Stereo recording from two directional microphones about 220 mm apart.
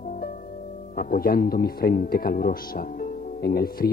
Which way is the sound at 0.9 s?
40° left (ahead or behind).